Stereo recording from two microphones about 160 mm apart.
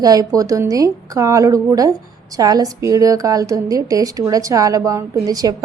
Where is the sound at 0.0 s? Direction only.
20° right (ahead or behind).